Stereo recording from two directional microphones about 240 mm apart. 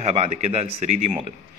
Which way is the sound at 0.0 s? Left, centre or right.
Right.